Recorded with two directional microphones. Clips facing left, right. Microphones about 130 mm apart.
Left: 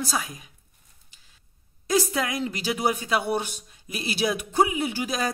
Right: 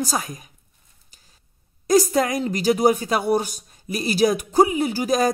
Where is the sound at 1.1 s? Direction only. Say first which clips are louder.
Right 5 dB; 40° right (ahead or behind).